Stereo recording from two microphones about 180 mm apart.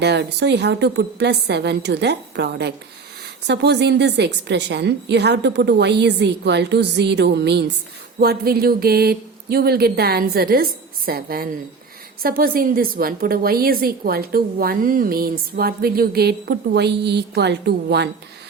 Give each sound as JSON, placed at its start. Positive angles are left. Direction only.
{"t": 0.0, "sound": "a woman's voice", "side_deg": -70}
{"t": 8.2, "sound": "a woman's voice", "side_deg": -60}